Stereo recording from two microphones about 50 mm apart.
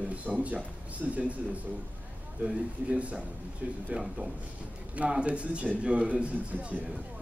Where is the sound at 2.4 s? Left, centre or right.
Right.